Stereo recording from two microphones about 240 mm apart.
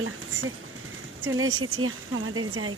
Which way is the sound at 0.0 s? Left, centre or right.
Right.